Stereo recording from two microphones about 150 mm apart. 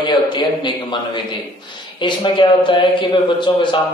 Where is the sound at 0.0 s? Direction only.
30° left (ahead or behind).